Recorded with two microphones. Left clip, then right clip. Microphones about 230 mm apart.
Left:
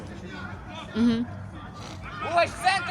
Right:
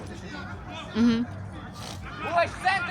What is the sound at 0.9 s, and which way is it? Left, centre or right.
Speech, centre.